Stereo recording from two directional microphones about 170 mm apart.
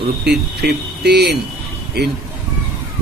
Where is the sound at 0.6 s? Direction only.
75° right (ahead or behind).